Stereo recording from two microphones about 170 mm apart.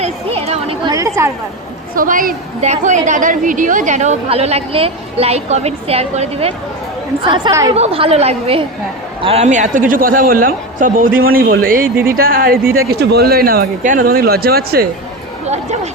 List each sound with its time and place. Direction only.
0.0 s a sound: 35° right (ahead or behind)
0.9 s chatter: 20° right (ahead or behind)
2.0 s a woman's voice: 55° right (ahead or behind)
12.9 s speech: 70° right (ahead or behind)
15.4 s speech: 40° right (ahead or behind)